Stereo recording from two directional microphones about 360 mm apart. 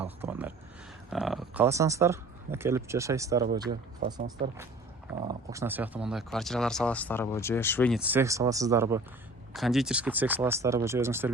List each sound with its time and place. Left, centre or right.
0.0 s speech: centre